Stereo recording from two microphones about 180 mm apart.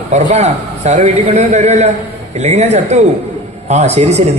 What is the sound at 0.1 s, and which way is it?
Speech, 40° right (ahead or behind).